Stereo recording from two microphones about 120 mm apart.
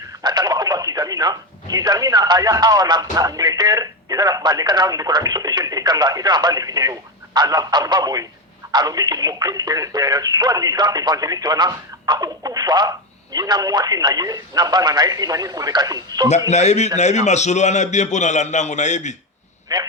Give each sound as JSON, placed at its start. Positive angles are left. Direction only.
{"t": 0.2, "sound": "speech", "side_deg": -35}
{"t": 16.5, "sound": "a man's voice", "side_deg": 70}
{"t": 19.7, "sound": "speech", "side_deg": -35}